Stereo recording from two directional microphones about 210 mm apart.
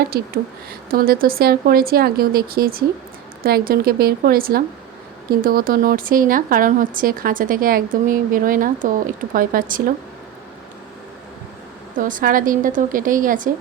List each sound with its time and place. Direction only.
0.9 s speech: 45° right (ahead or behind)
11.9 s speech: 40° right (ahead or behind)